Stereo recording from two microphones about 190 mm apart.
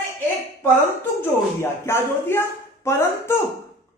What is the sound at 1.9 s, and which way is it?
Speech, 15° left (ahead or behind).